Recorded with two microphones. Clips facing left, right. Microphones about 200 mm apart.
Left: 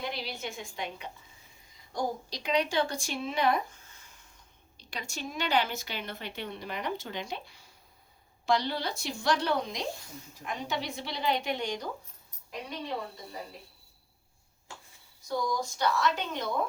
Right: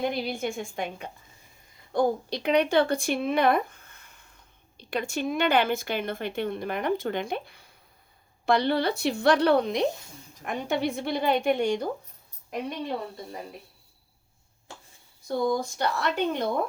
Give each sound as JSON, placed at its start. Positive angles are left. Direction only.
{"t": 0.0, "sound": "a woman's voice", "side_deg": -50}
{"t": 15.3, "sound": "speech", "side_deg": -55}